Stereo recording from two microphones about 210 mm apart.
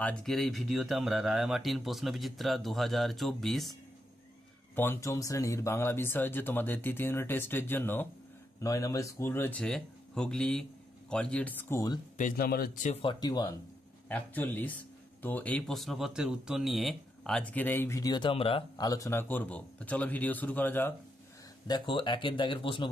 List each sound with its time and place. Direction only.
0.0 s speech: 5° left (ahead or behind)
4.7 s speech: 15° left (ahead or behind)
12.2 s speech: 40° left (ahead or behind)
13.0 s speech: 20° left (ahead or behind)
14.0 s speech: 10° left (ahead or behind)
21.6 s speech: 20° left (ahead or behind)